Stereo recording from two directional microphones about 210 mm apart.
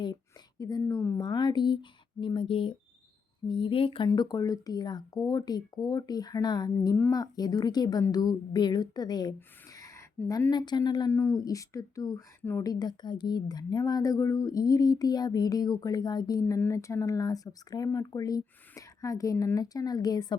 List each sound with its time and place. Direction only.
0.6 s speech: 15° left (ahead or behind)